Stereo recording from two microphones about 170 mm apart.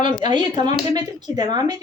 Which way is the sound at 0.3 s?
25° right (ahead or behind).